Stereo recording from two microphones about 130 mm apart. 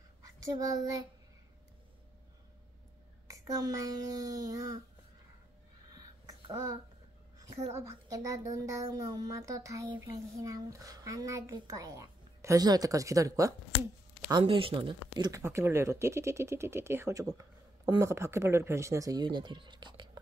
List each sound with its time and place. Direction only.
0.6 s speech: 25° right (ahead or behind)
3.3 s speech: 25° right (ahead or behind)
6.5 s speech: 25° right (ahead or behind)
14.4 s speech: 45° right (ahead or behind)
15.4 s speech: 20° right (ahead or behind); by 20.1 s 35° right (ahead or behind)